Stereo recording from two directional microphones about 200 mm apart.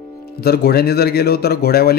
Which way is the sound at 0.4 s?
55° left (ahead or behind).